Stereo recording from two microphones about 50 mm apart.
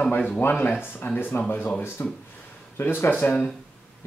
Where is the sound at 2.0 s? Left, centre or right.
Left.